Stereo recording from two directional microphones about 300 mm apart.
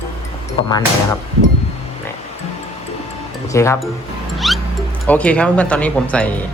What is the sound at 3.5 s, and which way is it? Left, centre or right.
Speech, centre.